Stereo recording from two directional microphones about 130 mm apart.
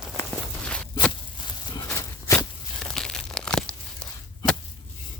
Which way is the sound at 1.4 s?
35° left (ahead or behind).